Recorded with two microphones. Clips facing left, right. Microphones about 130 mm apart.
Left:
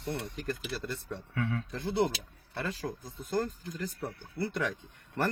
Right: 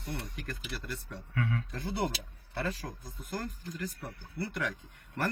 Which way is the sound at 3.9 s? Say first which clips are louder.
Left 4 dB; 25° left (ahead or behind).